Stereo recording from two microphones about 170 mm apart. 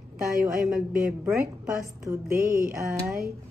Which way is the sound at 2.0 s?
15° right (ahead or behind).